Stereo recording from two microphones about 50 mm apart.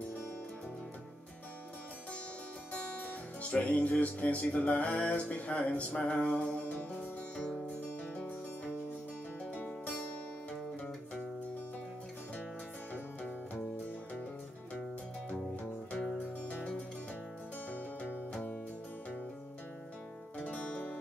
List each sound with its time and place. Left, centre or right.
2.7 s music: left
9.6 s music: left
15.9 s music: left
17.6 s music: left
18.3 s music: left
20.3 s music: centre